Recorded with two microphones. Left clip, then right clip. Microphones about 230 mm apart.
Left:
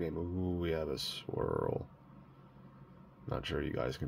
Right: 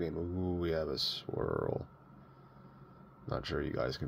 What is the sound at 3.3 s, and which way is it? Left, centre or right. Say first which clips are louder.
Speech: right 1 dB; centre.